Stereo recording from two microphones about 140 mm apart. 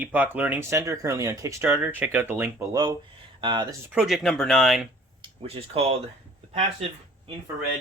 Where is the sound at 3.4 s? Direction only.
35° right (ahead or behind).